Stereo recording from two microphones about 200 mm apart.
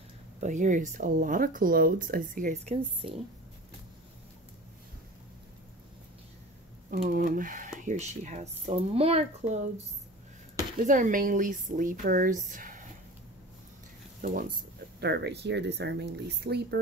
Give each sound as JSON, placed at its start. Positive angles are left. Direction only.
{"t": 0.4, "sound": "speech", "side_deg": -35}
{"t": 7.1, "sound": "speech", "side_deg": -45}
{"t": 10.9, "sound": "speech", "side_deg": -40}
{"t": 14.2, "sound": "speech", "side_deg": -45}
{"t": 15.0, "sound": "speech", "side_deg": -55}